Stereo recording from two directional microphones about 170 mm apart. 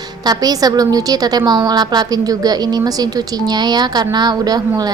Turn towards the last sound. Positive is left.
turn(degrees=-20)  # may be behind; listen again after turning